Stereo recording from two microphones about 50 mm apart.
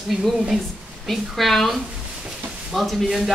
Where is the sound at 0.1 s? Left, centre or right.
Centre.